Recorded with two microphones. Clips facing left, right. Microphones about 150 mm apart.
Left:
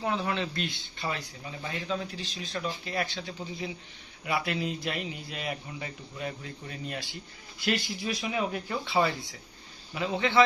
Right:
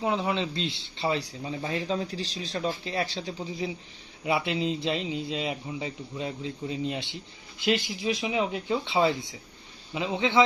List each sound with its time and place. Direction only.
0.0 s a man's voice: 20° right (ahead or behind)
4.3 s a man's voice: 20° right (ahead or behind)